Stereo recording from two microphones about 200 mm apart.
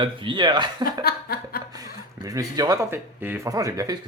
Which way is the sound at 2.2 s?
20° right (ahead or behind).